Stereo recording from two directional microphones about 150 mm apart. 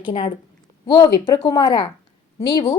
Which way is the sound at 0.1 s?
40° left (ahead or behind).